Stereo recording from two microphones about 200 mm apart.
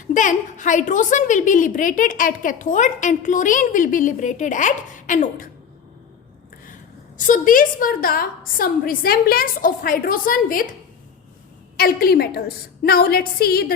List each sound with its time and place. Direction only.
0.1 s a woman's voice: 40° left (ahead or behind)
7.2 s a woman's voice: 40° left (ahead or behind)
11.8 s a woman's voice: 50° left (ahead or behind)